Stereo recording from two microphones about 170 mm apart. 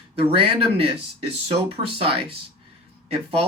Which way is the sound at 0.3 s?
35° right (ahead or behind).